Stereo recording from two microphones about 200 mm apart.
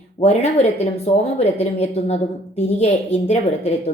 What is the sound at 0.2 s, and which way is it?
Speech, 35° left (ahead or behind).